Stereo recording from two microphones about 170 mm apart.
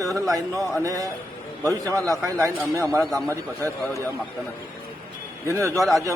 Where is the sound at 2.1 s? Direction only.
20° right (ahead or behind).